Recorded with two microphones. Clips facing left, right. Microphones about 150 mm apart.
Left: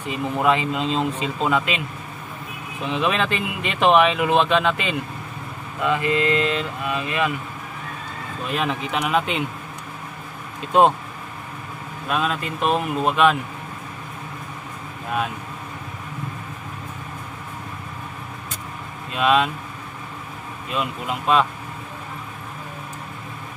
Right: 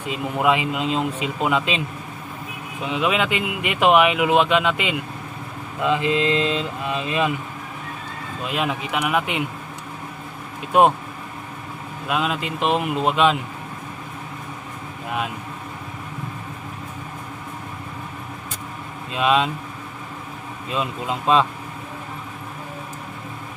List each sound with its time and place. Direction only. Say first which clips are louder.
0.1 s speech: even; 15° right (ahead or behind)
2.8 s speech: right 1 dB; 10° right (ahead or behind)
6.1 s mantra: even; 20° right (ahead or behind)
8.5 s speech: even; 10° right (ahead or behind)
12.1 s speech: even; 15° right (ahead or behind)
19.1 s mantra: even; 20° right (ahead or behind)
20.7 s mantra: right 1 dB; 25° right (ahead or behind)